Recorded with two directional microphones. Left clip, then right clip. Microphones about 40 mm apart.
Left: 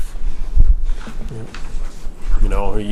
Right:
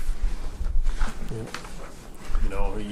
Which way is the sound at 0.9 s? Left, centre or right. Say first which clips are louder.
Right 3 dB; right.